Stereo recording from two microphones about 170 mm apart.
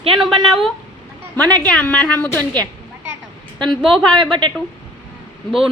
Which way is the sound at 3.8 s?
Centre (ahead or behind).